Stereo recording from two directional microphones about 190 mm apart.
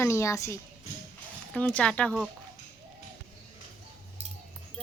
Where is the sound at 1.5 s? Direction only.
5° left (ahead or behind).